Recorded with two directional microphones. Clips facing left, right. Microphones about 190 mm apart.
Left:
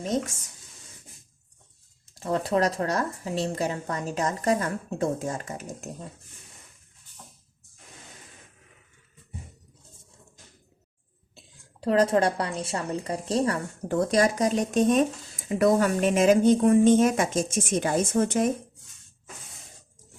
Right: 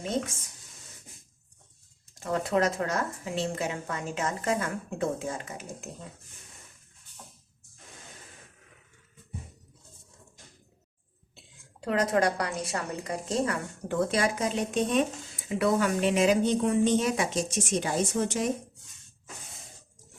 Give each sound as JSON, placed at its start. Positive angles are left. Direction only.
{"t": 2.1, "sound": "speech", "side_deg": 35}
{"t": 11.8, "sound": "a woman's voice", "side_deg": 30}